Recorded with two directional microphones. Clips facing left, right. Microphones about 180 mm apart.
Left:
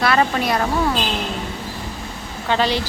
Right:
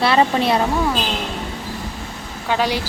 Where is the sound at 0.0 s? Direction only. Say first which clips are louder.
Right 2 dB; 25° right (ahead or behind).